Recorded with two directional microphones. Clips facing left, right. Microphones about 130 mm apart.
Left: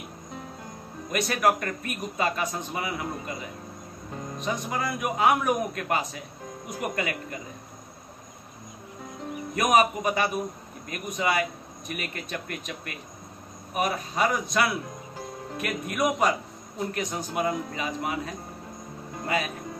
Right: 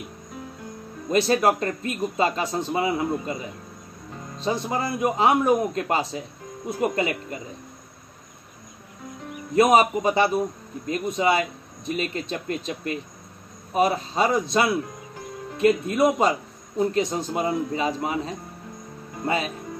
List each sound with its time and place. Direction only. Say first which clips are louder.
1.1 s speech: right 4 dB; 30° right (ahead or behind)
4.4 s speech: right 5 dB; 30° right (ahead or behind)
9.6 s speech: right 5 dB; 25° right (ahead or behind)